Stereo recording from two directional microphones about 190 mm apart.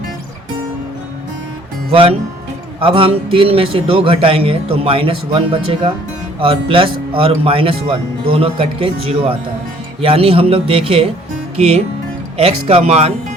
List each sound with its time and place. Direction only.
1.9 s a man's voice: 30° right (ahead or behind)